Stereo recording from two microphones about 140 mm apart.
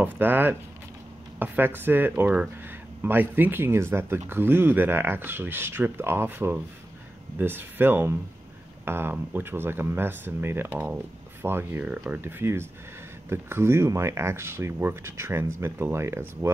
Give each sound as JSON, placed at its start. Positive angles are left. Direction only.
{"t": 0.0, "sound": "speech", "side_deg": -15}